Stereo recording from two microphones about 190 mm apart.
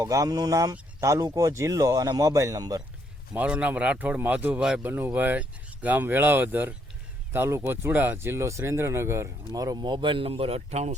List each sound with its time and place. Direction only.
0.0 s speech: 20° right (ahead or behind)
3.3 s speech: 5° right (ahead or behind); by 10.9 s 35° right (ahead or behind)